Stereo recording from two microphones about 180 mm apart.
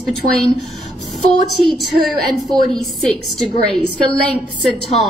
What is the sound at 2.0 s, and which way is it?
A woman's voice, centre (ahead or behind).